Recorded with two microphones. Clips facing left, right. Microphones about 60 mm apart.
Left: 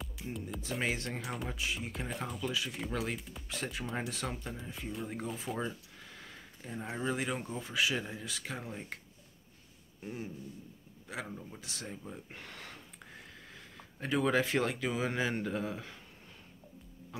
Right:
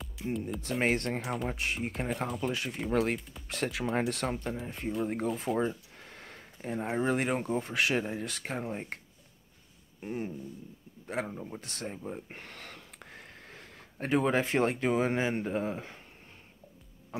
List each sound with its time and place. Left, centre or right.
0.2 s a sound: centre
0.6 s speech: right
2.4 s speech: right
3.2 s speech: centre
3.4 s speech: right
3.9 s speech: right
5.6 s a sound: right
6.9 s speech: right
10.0 s speech: right
11.6 s a sound: right
14.2 s speech: right
17.1 s a sound: right